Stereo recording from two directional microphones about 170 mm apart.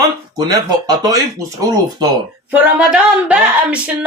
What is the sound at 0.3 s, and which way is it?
Speech, 25° right (ahead or behind).